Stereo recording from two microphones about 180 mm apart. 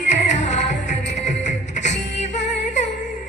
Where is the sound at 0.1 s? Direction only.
40° left (ahead or behind).